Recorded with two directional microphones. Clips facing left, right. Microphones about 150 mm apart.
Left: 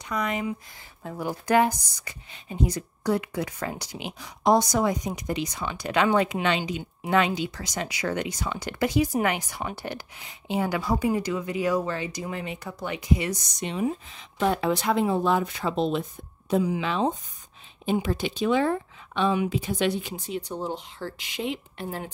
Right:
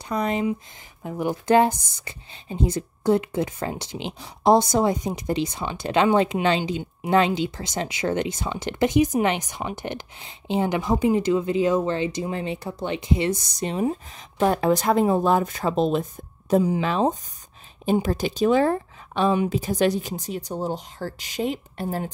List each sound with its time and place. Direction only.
0.1 s speech: 30° right (ahead or behind)
1.0 s speech: 20° right (ahead or behind); by 22.1 s 40° right (ahead or behind)